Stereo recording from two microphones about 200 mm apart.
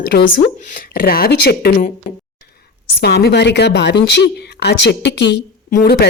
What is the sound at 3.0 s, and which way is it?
Speech, 55° left (ahead or behind).